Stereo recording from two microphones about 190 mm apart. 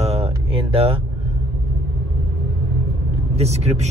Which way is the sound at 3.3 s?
35° right (ahead or behind).